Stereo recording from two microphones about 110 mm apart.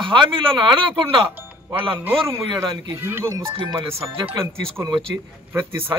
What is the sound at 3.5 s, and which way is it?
Speech, 50° right (ahead or behind).